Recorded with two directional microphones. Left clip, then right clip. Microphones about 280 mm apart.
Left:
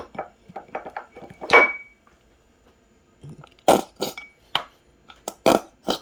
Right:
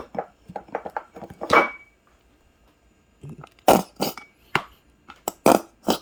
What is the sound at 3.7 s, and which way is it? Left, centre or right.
Chink, right.